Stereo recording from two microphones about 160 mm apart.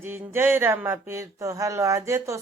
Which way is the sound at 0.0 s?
15° right (ahead or behind).